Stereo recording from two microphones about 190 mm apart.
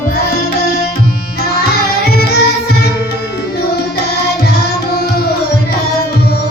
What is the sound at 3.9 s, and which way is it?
Music, 60° left (ahead or behind).